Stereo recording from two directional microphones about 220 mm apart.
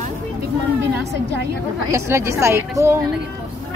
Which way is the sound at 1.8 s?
15° right (ahead or behind).